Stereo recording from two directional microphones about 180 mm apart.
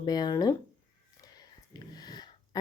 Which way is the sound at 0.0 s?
25° left (ahead or behind).